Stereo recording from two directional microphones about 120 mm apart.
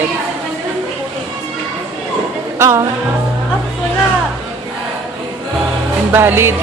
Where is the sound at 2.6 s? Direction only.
25° right (ahead or behind).